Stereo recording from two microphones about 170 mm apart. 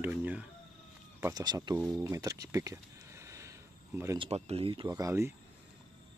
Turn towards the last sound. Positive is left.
turn(degrees=-15)  # may be behind; listen again after turning